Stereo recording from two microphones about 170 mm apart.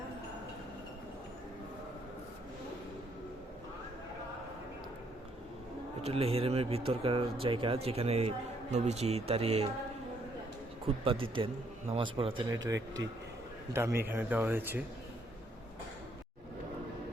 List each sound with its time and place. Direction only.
6.0 s speech: 35° right (ahead or behind)
10.8 s speech: 35° right (ahead or behind); by 14.8 s 10° right (ahead or behind)